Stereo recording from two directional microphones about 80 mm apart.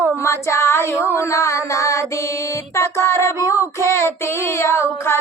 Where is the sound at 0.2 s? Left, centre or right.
Left.